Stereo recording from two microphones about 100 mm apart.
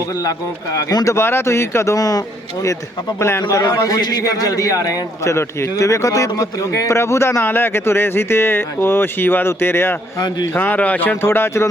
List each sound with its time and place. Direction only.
0.2 s speech: 40° left (ahead or behind)
1.1 s a man's voice: 25° left (ahead or behind)
3.2 s a man's voice: 25° left (ahead or behind)
3.6 s a man's voice: 40° left (ahead or behind)